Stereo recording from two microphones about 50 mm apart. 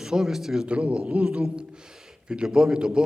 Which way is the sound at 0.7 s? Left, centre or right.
Right.